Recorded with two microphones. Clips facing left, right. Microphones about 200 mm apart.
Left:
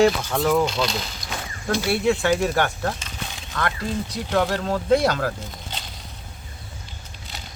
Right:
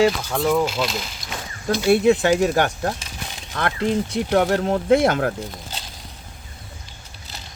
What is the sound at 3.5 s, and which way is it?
Speech, 25° right (ahead or behind).